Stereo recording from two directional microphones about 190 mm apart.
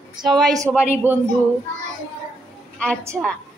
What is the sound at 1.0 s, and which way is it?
Speech, 10° right (ahead or behind).